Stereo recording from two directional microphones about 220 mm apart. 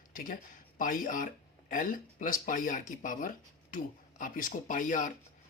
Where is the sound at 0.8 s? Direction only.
35° left (ahead or behind).